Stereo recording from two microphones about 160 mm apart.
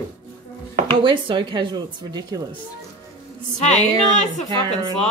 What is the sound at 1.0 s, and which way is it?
A woman's voice, 30° right (ahead or behind).